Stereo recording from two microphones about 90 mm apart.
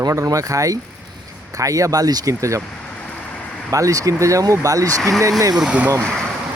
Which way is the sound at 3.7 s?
40° right (ahead or behind).